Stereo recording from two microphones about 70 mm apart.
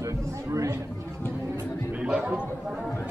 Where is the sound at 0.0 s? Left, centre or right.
Right.